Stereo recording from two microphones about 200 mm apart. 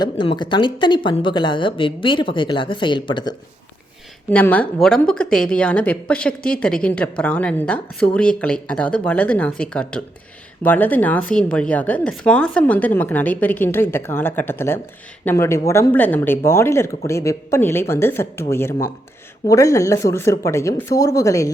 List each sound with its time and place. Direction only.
0.0 s speech: 20° left (ahead or behind)
4.3 s speech: 5° left (ahead or behind)